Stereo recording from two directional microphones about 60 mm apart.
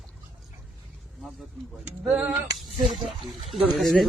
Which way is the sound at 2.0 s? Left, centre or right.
Centre.